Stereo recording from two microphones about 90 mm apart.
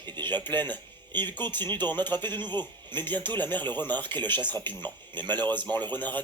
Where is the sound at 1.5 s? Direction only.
20° left (ahead or behind).